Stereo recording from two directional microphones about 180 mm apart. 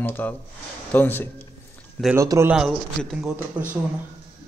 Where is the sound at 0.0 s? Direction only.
10° left (ahead or behind).